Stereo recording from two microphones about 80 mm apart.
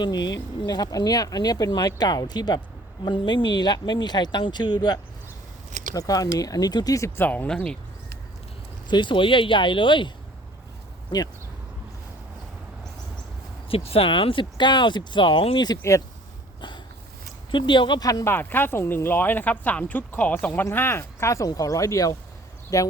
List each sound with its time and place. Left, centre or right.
0.6 s speech: left
3.0 s speech: left
5.9 s speech: left
7.2 s speech: centre
8.9 s speech: left
11.1 s speech: left
14.1 s speech: left
15.8 s speech: left
16.6 s a sound: left
17.5 s speech: left
18.0 s speech: left
18.3 s speech: left
21.0 s speech: left